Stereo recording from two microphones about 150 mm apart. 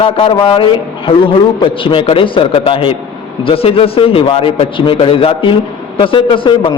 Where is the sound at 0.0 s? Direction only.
40° left (ahead or behind).